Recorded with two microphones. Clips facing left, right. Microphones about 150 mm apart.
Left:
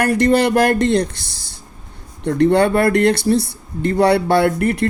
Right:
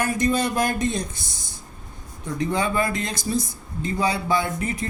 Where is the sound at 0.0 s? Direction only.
70° left (ahead or behind).